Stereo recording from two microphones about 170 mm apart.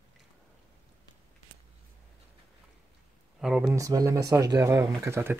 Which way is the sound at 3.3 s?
5° right (ahead or behind).